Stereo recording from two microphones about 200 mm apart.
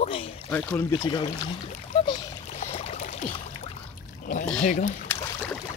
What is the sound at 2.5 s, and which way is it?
Boat, 35° left (ahead or behind).